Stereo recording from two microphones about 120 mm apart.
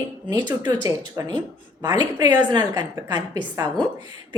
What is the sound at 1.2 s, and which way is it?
A woman's voice, 25° right (ahead or behind).